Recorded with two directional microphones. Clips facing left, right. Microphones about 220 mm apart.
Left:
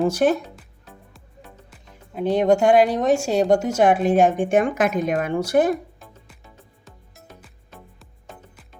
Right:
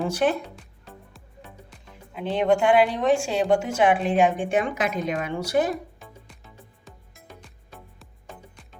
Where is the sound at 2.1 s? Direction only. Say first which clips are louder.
Left 4 dB; 40° left (ahead or behind).